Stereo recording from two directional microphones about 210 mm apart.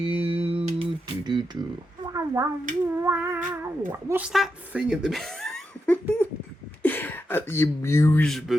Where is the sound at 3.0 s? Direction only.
10° right (ahead or behind).